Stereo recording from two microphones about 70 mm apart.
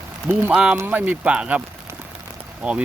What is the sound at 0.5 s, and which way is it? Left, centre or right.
Speech, centre.